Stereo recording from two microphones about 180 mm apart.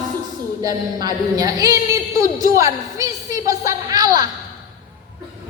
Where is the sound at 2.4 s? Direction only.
20° right (ahead or behind).